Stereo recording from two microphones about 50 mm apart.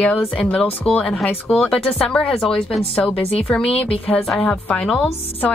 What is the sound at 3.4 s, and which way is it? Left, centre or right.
Speech, left.